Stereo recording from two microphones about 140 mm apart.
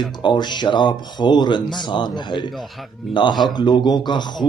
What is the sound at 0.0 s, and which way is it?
Speech, 35° left (ahead or behind).